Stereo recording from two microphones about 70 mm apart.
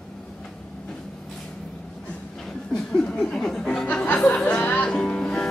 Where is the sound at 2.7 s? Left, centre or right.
Centre.